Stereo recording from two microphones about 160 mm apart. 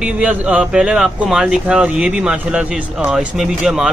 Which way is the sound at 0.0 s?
10° right (ahead or behind).